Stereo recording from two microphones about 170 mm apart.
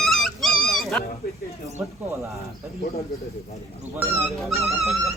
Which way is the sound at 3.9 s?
15° right (ahead or behind).